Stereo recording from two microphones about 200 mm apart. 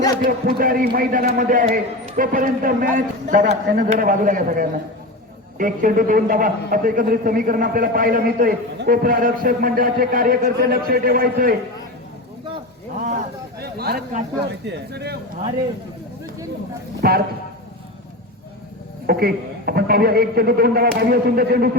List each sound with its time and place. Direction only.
0.3 s a man's voice: 45° right (ahead or behind)
13.6 s a man's voice: 50° right (ahead or behind)
17.0 s speech: 50° right (ahead or behind)
19.0 s a man's voice: 50° right (ahead or behind)